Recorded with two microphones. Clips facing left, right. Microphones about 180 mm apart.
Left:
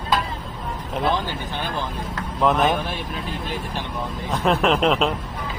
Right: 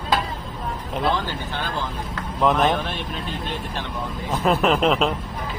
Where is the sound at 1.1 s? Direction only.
15° left (ahead or behind).